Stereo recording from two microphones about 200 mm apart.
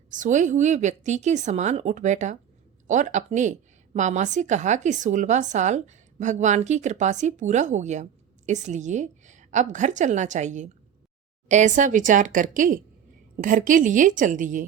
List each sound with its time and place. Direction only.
0.1 s speech: 40° right (ahead or behind)